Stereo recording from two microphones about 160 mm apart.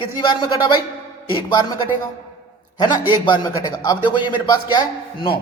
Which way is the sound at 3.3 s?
25° left (ahead or behind).